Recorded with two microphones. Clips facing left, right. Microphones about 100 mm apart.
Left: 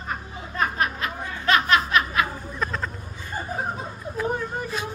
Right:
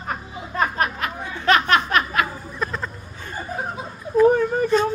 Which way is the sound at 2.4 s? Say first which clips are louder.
Right 1 dB; centre (ahead or behind).